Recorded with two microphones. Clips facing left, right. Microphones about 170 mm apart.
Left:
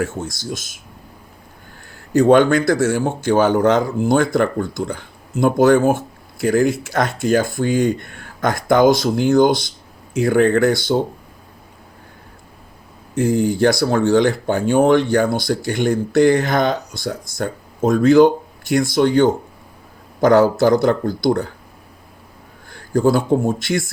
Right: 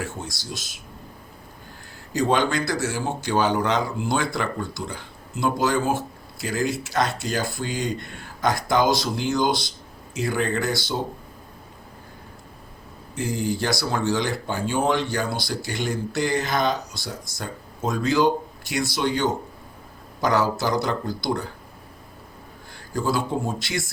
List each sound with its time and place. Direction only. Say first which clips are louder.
0.0 s speech: left 9 dB; 50° left (ahead or behind)
2.1 s speech: left 10 dB; 55° left (ahead or behind)
13.1 s speech: left 9 dB; 55° left (ahead or behind)
22.7 s speech: left 9 dB; 50° left (ahead or behind)